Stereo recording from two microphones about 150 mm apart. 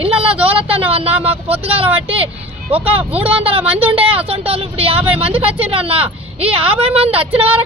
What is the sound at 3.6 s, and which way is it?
Speech, 10° right (ahead or behind).